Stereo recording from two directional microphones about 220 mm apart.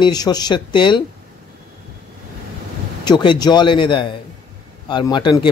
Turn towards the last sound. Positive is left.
turn(degrees=20)  # may be behind; listen again after turning